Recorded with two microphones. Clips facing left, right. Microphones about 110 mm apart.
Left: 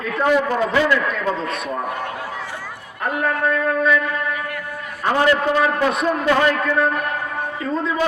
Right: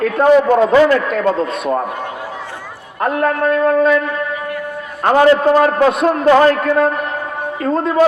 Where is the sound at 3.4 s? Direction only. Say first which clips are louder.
Right 7 dB; 40° right (ahead or behind).